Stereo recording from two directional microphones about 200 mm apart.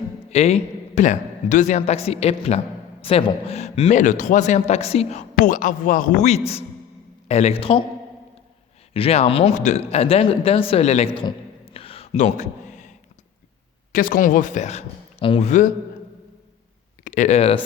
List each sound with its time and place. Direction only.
0.3 s a man's voice: 35° left (ahead or behind)
8.9 s a man's voice: 30° left (ahead or behind)
13.9 s a man's voice: 45° left (ahead or behind)
17.0 s speech: 40° left (ahead or behind)